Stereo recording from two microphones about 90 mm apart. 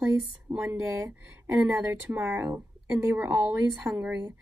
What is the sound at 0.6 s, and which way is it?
Speech, 30° right (ahead or behind).